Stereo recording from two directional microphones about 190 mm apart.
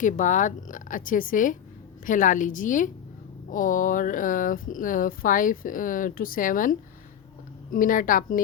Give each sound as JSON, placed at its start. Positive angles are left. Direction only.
{"t": 0.0, "sound": "speech", "side_deg": 40}